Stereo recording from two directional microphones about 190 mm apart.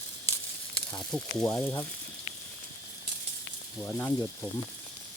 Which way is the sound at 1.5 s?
15° left (ahead or behind).